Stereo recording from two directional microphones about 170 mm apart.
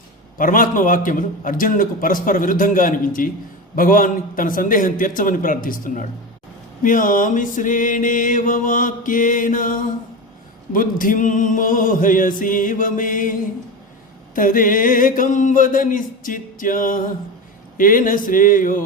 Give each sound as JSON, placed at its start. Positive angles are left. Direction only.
{"t": 0.3, "sound": "mantra", "side_deg": 55}
{"t": 14.3, "sound": "mantra", "side_deg": 55}